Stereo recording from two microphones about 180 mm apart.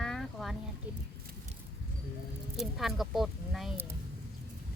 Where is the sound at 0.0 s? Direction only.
Centre (ahead or behind).